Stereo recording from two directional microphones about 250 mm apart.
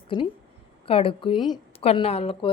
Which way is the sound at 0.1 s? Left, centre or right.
Centre.